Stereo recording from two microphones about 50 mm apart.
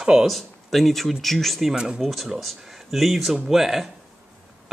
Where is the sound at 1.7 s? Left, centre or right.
Centre.